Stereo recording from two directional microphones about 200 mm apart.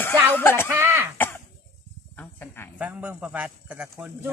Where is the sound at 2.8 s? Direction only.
5° right (ahead or behind).